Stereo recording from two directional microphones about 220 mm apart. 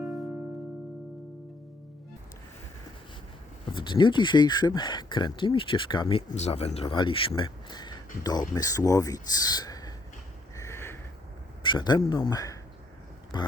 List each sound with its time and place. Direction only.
3.7 s speech: 20° left (ahead or behind)
10.6 s sniff: 10° left (ahead or behind)
11.6 s speech: 20° left (ahead or behind)